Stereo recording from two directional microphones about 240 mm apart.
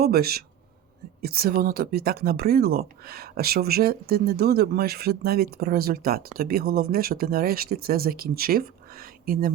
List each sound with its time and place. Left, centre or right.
0.0 s speech: right